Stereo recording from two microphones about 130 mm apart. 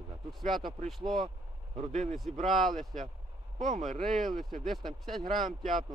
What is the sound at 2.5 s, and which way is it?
Speech, centre (ahead or behind).